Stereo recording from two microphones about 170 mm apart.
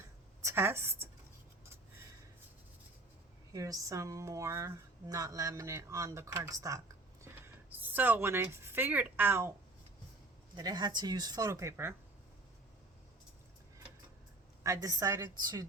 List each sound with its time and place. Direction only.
0.4 s a woman's voice: 15° right (ahead or behind)
3.5 s a woman's voice: 20° right (ahead or behind)
10.5 s speech: 25° right (ahead or behind)
14.6 s speech: 20° right (ahead or behind)